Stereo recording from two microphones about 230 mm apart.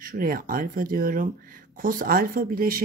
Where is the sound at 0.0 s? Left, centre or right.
Right.